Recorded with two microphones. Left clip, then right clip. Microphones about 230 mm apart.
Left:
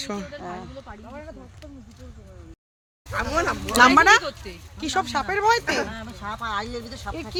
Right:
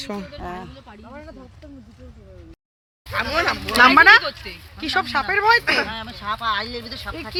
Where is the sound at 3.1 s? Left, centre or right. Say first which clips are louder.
Right 3 dB; left.